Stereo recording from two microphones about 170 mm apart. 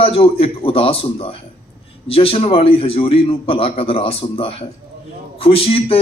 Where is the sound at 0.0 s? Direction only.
35° left (ahead or behind).